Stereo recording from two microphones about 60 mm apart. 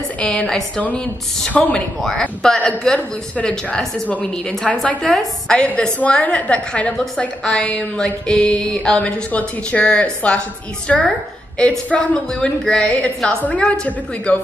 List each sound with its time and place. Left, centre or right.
0.2 s a woman's voice: left
2.0 s a woman's voice: centre
3.0 s a woman's voice: left
5.1 s a woman's voice: centre
13.4 s a woman's voice: left